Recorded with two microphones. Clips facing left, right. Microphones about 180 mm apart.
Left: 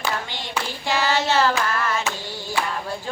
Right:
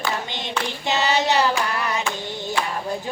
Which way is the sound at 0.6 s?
20° right (ahead or behind).